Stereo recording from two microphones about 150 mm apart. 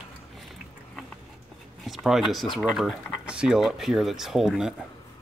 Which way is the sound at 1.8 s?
Centre (ahead or behind).